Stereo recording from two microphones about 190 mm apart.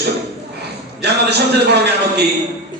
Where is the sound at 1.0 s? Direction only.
60° right (ahead or behind).